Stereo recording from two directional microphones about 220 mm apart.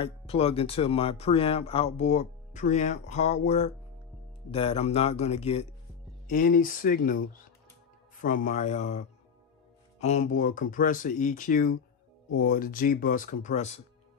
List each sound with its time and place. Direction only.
0.0 s speech: 25° left (ahead or behind)
6.2 s speech: 40° left (ahead or behind)
8.2 s speech: 35° left (ahead or behind)